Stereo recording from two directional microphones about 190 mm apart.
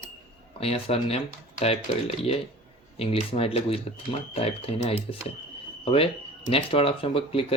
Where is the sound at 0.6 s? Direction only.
30° left (ahead or behind).